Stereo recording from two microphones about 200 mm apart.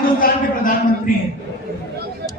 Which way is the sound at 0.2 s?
45° left (ahead or behind).